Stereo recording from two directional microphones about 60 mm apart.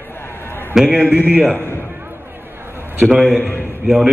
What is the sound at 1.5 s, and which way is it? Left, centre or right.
Speech, left.